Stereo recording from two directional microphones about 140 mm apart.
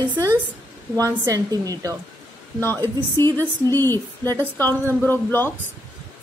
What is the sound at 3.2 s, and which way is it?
A woman's voice, 20° left (ahead or behind).